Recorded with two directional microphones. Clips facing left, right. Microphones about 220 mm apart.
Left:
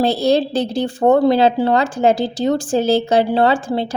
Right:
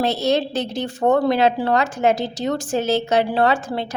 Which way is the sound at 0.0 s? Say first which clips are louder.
Left 4 dB; 30° left (ahead or behind).